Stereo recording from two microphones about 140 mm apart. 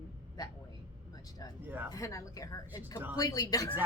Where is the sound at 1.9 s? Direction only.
25° left (ahead or behind).